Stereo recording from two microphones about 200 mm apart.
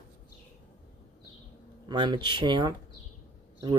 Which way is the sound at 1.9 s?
20° right (ahead or behind).